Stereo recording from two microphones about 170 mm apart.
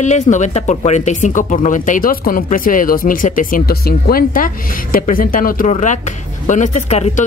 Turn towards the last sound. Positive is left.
turn(degrees=40)  # may be behind; listen again after turning